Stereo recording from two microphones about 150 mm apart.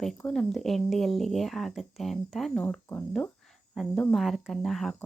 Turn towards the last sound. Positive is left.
turn(degrees=0)  # may be behind; listen again after turning